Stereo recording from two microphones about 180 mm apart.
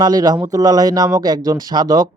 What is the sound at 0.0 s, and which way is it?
A man's voice, 20° right (ahead or behind).